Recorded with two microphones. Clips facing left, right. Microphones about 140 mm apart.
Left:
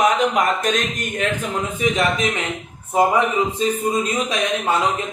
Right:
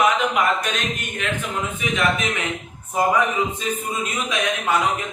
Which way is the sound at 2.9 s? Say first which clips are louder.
Left 3 dB; 30° left (ahead or behind).